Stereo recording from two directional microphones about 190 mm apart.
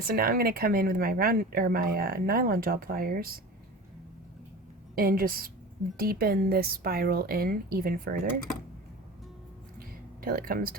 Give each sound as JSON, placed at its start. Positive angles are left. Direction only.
{"t": 0.0, "sound": "speech", "side_deg": -50}
{"t": 4.9, "sound": "speech", "side_deg": -50}
{"t": 9.7, "sound": "a sound", "side_deg": -50}